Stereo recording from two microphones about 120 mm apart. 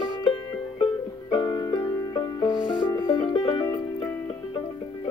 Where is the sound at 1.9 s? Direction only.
25° left (ahead or behind).